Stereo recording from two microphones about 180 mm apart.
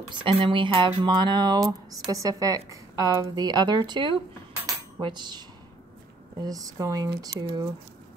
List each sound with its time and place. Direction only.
0.1 s speech: 25° right (ahead or behind)
4.6 s cutlery: 20° right (ahead or behind)
6.4 s speech: 20° right (ahead or behind)